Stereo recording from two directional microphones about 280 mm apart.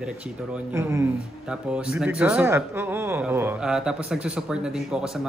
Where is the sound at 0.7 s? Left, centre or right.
Centre.